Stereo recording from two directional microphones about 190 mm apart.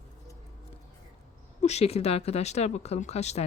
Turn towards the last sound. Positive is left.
turn(degrees=35)  # may be behind; listen again after turning